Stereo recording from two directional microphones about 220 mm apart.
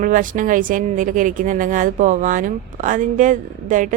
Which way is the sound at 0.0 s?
35° right (ahead or behind).